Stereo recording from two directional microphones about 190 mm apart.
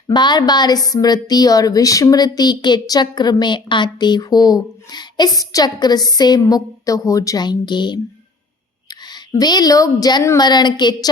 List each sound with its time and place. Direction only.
0.1 s a woman's voice: 25° left (ahead or behind)